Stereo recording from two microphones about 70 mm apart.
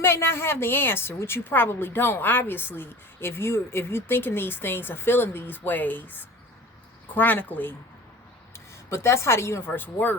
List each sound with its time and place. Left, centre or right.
0.0 s a woman's voice: left
8.5 s speech: left